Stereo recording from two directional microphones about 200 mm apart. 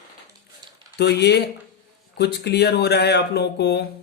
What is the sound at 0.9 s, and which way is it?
Speech, 55° left (ahead or behind).